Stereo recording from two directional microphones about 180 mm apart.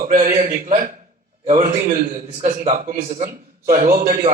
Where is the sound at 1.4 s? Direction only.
35° right (ahead or behind).